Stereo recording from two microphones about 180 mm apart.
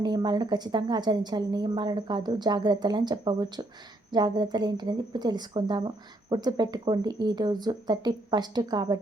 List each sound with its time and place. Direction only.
0.0 s a woman's voice: 25° right (ahead or behind)